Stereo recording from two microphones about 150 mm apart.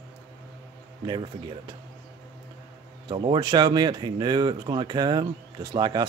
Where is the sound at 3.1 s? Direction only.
30° right (ahead or behind).